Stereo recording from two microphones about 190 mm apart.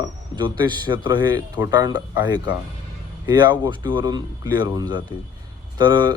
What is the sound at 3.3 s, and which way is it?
Speech, 20° right (ahead or behind).